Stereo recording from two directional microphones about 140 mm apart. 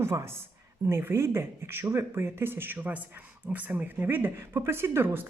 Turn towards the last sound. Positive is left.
turn(degrees=-15)  # may be behind; listen again after turning